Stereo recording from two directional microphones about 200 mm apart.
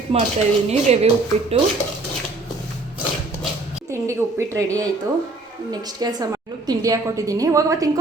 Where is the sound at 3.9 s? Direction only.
15° right (ahead or behind).